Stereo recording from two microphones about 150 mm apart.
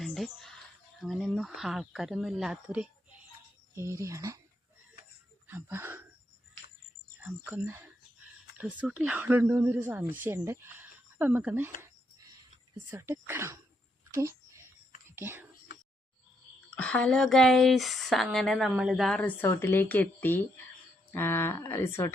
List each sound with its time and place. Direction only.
0.0 s a sound: centre (ahead or behind)
1.0 s speech: centre (ahead or behind); by 4.4 s 20° right (ahead or behind)
5.5 s speech: 15° right (ahead or behind)
7.2 s speech: 10° right (ahead or behind)
12.7 s speech: 15° right (ahead or behind)
14.1 s a sound: 20° right (ahead or behind)
15.1 s speech: 15° right (ahead or behind)
16.7 s speech: 5° left (ahead or behind)